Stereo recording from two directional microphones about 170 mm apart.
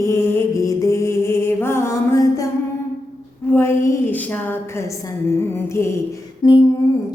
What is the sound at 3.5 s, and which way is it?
Music, 15° left (ahead or behind).